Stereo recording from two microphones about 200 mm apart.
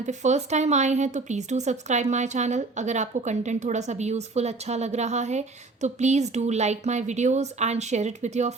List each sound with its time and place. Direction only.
0.0 s a woman's voice: 35° right (ahead or behind)